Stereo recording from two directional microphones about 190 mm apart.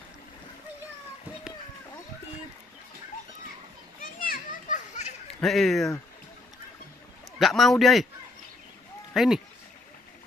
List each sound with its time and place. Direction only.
4.0 s children playing: 45° left (ahead or behind)
5.4 s a man's voice: centre (ahead or behind)
7.3 s a man's voice: centre (ahead or behind)
9.1 s a man's voice: centre (ahead or behind)